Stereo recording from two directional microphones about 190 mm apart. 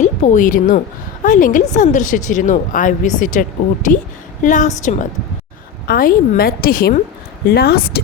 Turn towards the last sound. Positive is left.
turn(degrees=55)  # may be behind; listen again after turning